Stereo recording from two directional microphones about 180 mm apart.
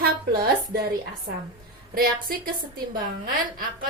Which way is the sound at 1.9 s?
55° right (ahead or behind).